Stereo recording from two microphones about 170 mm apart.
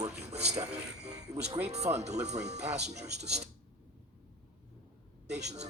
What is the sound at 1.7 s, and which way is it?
Speech, 40° right (ahead or behind).